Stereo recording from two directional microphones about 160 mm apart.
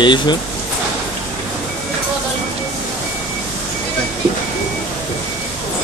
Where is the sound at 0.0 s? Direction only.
30° left (ahead or behind).